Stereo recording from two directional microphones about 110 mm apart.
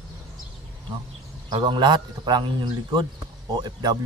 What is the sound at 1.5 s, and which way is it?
A man's voice, 45° right (ahead or behind).